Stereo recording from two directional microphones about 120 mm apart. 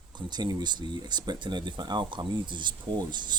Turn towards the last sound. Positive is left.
turn(degrees=-40)  # may be behind; listen again after turning